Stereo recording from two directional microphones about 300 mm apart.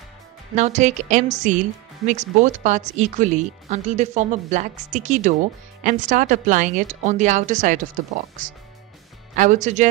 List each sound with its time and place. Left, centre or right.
0.6 s speech: right